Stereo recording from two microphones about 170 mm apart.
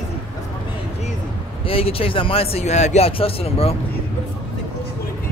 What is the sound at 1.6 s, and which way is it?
A man's voice, 35° left (ahead or behind).